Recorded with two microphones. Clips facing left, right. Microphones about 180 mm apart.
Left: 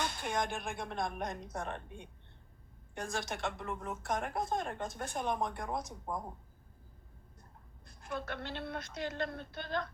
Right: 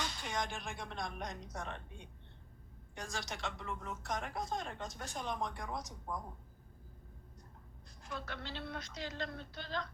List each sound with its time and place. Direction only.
0.0 s a woman's voice: 55° left (ahead or behind)
7.9 s a woman's voice: 55° left (ahead or behind)